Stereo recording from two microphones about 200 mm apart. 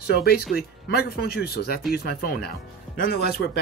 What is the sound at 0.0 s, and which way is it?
Speech, 50° left (ahead or behind).